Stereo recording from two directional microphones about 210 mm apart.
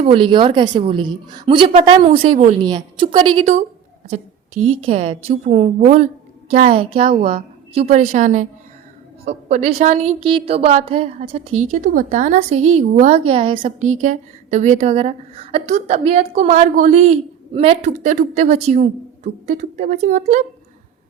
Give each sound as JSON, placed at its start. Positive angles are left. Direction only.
{"t": 0.0, "sound": "a woman's voice", "side_deg": -25}
{"t": 2.2, "sound": "a woman's voice", "side_deg": -35}
{"t": 2.6, "sound": "a woman's voice", "side_deg": -20}
{"t": 4.8, "sound": "a woman's voice", "side_deg": -25}
{"t": 9.5, "sound": "a woman's voice", "side_deg": -30}
{"t": 13.6, "sound": "a woman's voice", "side_deg": -35}